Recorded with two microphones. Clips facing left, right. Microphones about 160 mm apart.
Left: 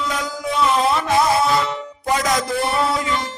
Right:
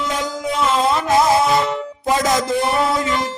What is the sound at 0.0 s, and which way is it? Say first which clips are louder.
Music: right 2 dB; 25° right (ahead or behind).